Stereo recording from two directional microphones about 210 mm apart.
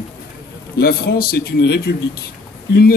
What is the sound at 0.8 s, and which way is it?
A man's voice, 45° left (ahead or behind).